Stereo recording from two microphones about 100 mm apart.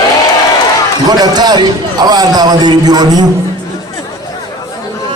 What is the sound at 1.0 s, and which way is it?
A man's voice, 45° right (ahead or behind).